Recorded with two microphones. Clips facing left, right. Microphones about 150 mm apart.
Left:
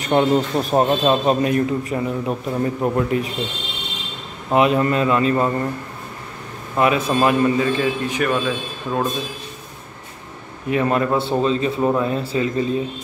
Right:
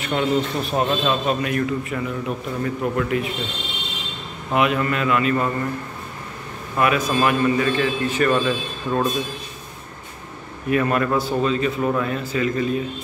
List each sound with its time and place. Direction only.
0.0 s a man's voice: 40° left (ahead or behind)
4.5 s a man's voice: 30° left (ahead or behind)
6.8 s a man's voice: 25° left (ahead or behind); by 9.1 s 5° left (ahead or behind)
10.7 s a man's voice: 20° left (ahead or behind)